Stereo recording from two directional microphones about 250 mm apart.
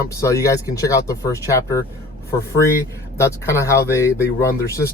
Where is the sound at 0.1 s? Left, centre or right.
Centre.